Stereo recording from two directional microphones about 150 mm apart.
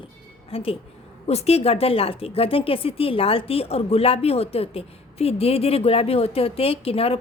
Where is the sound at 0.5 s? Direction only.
40° left (ahead or behind).